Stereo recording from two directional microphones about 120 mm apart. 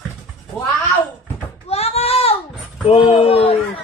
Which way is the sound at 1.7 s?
60° left (ahead or behind).